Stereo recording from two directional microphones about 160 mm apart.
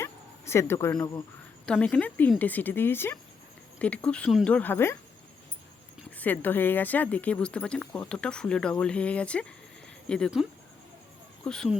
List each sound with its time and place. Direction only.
0.0 s a sound: 15° left (ahead or behind)
1.6 s speech: 5° left (ahead or behind)
6.1 s speech: 10° left (ahead or behind)
11.4 s speech: 5° left (ahead or behind)